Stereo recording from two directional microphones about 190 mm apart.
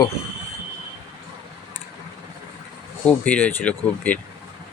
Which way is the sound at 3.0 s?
10° left (ahead or behind).